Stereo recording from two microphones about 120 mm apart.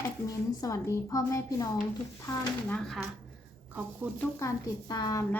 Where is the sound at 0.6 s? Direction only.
30° left (ahead or behind).